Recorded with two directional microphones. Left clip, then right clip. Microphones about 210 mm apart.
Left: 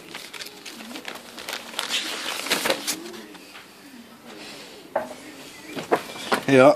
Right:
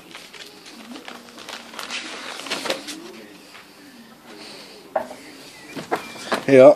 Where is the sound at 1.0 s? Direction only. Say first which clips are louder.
Left 3 dB; 25° left (ahead or behind).